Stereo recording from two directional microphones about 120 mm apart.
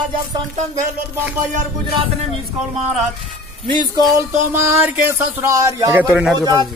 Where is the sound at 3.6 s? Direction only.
35° right (ahead or behind).